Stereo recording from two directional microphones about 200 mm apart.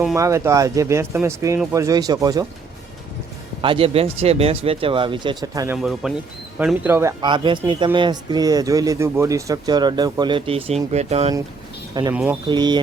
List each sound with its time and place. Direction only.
0.2 s speech: 15° right (ahead or behind)
3.6 s speech: 25° right (ahead or behind)
5.7 s speech: 5° right (ahead or behind); by 11.3 s 30° right (ahead or behind)
12.1 s speech: 10° right (ahead or behind)
12.5 s speech: 20° right (ahead or behind)